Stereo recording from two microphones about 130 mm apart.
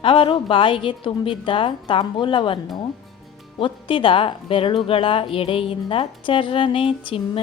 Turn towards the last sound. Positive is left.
turn(degrees=40)  # may be behind; listen again after turning